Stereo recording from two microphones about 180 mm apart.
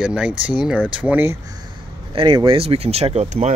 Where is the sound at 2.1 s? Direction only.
25° right (ahead or behind).